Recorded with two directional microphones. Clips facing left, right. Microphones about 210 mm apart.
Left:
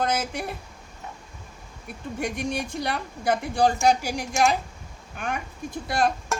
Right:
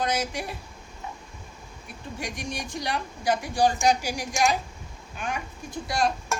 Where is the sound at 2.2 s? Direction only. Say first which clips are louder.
Left 6 dB; 55° left (ahead or behind).